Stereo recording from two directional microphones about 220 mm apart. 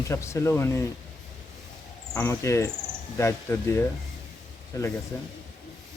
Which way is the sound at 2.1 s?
10° left (ahead or behind).